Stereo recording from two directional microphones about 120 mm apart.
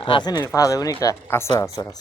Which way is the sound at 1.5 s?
35° left (ahead or behind).